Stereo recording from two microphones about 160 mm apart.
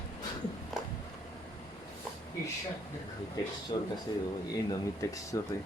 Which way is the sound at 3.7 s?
35° left (ahead or behind).